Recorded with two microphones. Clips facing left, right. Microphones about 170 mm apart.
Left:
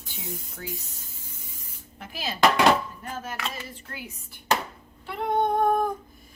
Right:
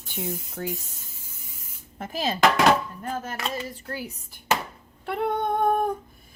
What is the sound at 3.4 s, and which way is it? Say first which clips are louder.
Speech: right 4 dB; 35° right (ahead or behind).